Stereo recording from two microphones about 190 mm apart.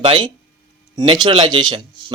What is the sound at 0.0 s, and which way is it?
Speech, 25° right (ahead or behind).